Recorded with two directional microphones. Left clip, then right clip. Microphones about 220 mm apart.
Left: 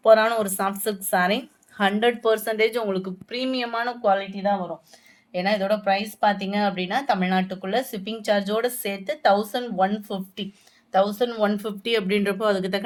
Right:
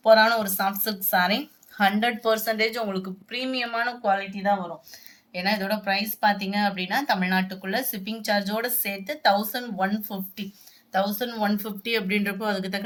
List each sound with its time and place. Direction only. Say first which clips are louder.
0.0 s speech: left 1 dB; 45° left (ahead or behind)